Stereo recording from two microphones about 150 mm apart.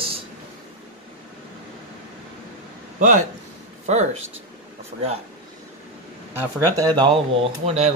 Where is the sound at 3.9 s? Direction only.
50° right (ahead or behind).